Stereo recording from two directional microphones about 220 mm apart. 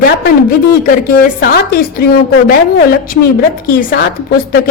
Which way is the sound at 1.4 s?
45° left (ahead or behind).